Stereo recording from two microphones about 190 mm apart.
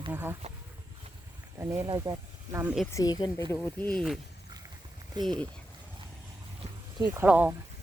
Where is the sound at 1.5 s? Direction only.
15° right (ahead or behind).